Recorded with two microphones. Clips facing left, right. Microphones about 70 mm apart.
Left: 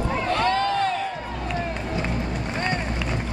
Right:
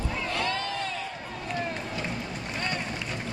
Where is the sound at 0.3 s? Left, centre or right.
Left.